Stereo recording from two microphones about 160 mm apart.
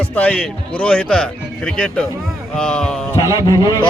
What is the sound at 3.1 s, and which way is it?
Speech, 25° left (ahead or behind).